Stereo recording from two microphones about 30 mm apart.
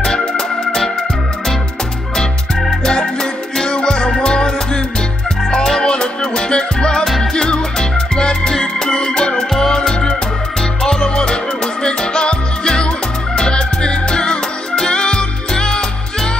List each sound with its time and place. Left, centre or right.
0.0 s organ: left
2.8 s music: left